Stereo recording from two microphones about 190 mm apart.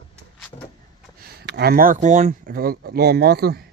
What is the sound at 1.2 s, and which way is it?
Speech, 60° right (ahead or behind).